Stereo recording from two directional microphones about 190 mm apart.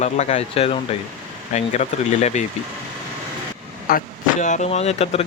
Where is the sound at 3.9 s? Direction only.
45° left (ahead or behind).